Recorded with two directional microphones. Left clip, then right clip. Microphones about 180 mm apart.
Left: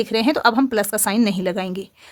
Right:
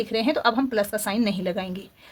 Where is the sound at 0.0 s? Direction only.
45° left (ahead or behind).